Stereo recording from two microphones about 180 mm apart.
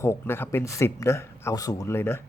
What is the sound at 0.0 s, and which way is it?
A man's voice, 15° left (ahead or behind).